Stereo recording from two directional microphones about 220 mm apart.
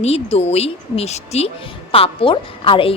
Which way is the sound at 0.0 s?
30° left (ahead or behind).